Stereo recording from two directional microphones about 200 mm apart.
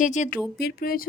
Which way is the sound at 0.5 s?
50° left (ahead or behind).